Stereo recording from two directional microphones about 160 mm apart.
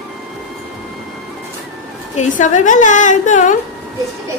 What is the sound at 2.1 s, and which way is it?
A woman's voice, 45° left (ahead or behind).